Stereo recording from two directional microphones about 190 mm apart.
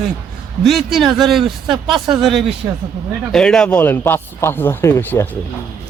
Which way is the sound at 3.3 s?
5° left (ahead or behind).